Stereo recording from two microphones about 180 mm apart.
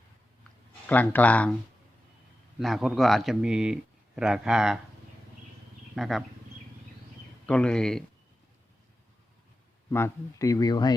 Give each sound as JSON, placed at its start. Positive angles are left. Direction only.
{"t": 0.9, "sound": "speech", "side_deg": 10}
{"t": 2.6, "sound": "speech", "side_deg": 0}
{"t": 5.9, "sound": "speech", "side_deg": 0}
{"t": 7.4, "sound": "speech", "side_deg": 5}
{"t": 9.9, "sound": "speech", "side_deg": 15}